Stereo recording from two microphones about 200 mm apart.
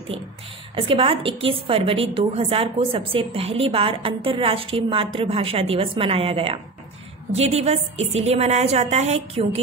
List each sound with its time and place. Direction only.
0.7 s a woman's voice: 25° right (ahead or behind)